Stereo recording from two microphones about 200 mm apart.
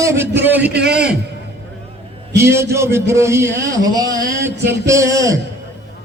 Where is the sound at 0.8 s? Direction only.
55° right (ahead or behind).